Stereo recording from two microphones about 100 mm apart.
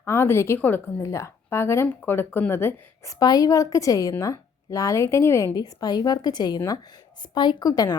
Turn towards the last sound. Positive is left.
turn(degrees=40)  # may be behind; listen again after turning